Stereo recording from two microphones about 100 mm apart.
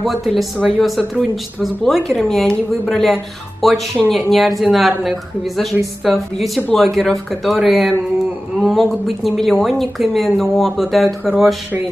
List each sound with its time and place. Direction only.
0.0 s speech: centre (ahead or behind)